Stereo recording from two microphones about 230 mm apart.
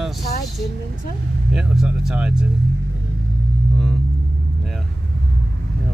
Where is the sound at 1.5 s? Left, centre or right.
Centre.